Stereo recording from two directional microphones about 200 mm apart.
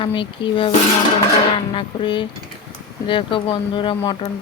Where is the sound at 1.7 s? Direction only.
25° left (ahead or behind).